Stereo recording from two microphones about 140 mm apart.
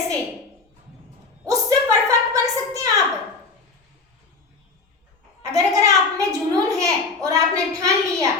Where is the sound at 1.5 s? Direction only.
25° right (ahead or behind).